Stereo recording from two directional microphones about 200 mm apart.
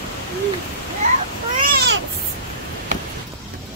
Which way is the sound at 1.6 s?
55° right (ahead or behind).